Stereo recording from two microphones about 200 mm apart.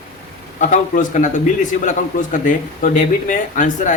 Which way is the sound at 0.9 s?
40° left (ahead or behind).